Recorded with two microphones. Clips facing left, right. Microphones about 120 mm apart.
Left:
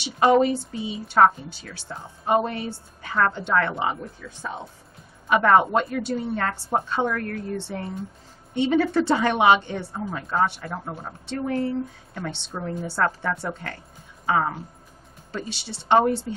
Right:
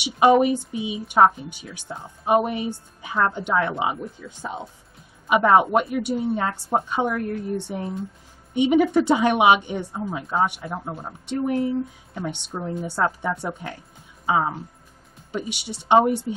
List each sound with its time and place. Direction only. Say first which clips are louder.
0.0 s a woman's voice: right 2 dB; 15° right (ahead or behind)